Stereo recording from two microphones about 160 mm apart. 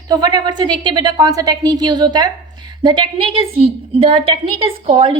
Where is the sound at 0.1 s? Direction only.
25° right (ahead or behind).